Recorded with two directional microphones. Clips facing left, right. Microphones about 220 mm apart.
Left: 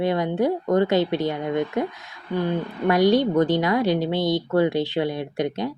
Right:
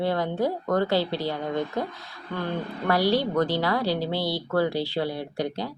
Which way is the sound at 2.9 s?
20° left (ahead or behind).